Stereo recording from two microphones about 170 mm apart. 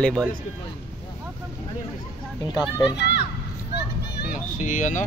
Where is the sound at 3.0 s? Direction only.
85° left.